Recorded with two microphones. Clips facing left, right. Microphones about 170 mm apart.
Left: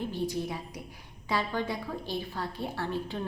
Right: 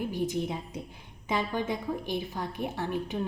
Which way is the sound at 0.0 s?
15° right (ahead or behind).